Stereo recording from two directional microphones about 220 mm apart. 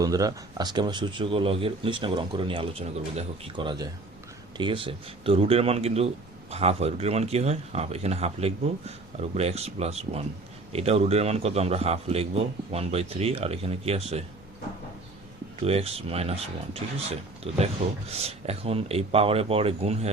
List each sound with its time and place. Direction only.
0.0 s speech: 15° right (ahead or behind)
15.6 s speech: 25° right (ahead or behind)